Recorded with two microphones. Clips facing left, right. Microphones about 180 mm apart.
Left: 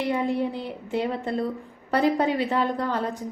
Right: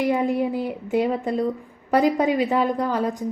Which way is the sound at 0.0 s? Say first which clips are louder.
Right 4 dB; 20° right (ahead or behind).